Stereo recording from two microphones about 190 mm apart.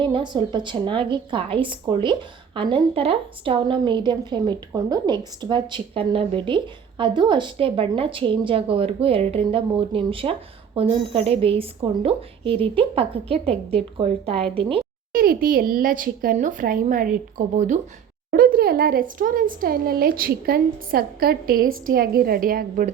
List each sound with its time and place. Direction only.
0.0 s a woman's voice: 25° right (ahead or behind)
15.1 s speech: 50° right (ahead or behind)